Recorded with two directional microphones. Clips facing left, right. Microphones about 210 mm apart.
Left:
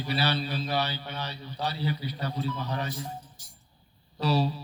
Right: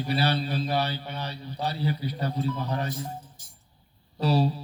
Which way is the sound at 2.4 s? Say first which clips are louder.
Right 2 dB; 40° right (ahead or behind).